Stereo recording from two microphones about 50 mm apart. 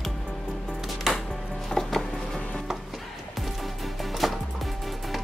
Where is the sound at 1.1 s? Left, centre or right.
Centre.